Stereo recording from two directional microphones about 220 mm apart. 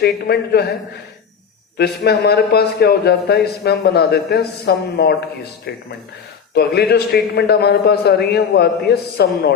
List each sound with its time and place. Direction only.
0.0 s a man's voice: 45° left (ahead or behind)
1.8 s a man's voice: 45° left (ahead or behind)